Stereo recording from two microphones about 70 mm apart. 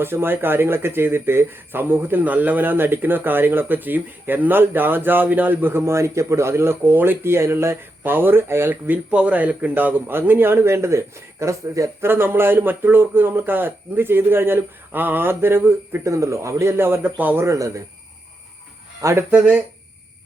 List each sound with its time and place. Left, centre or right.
0.0 s speech: right
5.8 s speech: right
8.0 s speech: right
8.9 s speech: centre; by 11.9 s right
11.9 s speech: right
16.0 s speech: right
17.4 s speech: right
19.3 s speech: centre